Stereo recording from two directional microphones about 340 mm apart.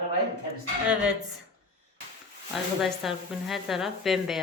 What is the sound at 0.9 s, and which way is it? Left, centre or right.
Speech, centre.